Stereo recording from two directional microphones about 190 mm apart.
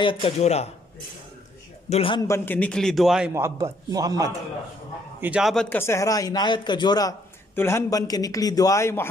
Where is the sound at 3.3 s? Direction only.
15° right (ahead or behind).